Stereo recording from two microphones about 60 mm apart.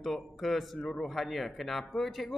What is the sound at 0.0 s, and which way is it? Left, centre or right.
Speech, centre.